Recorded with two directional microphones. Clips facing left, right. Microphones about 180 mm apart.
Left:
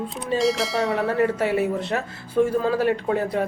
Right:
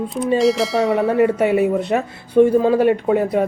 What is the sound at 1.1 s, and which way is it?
Speech, 20° right (ahead or behind).